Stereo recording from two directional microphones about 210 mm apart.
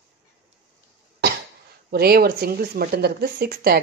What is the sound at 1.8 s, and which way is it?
Speech, 45° right (ahead or behind).